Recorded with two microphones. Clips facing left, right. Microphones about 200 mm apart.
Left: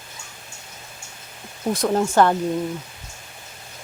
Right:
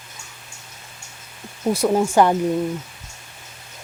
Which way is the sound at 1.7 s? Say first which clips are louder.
Right 2 dB; 10° right (ahead or behind).